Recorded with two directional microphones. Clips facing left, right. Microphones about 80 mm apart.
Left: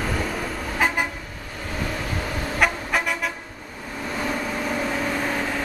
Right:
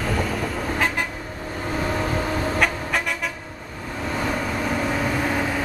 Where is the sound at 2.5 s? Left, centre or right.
Centre.